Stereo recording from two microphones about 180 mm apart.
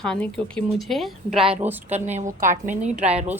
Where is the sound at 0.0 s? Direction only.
5° left (ahead or behind).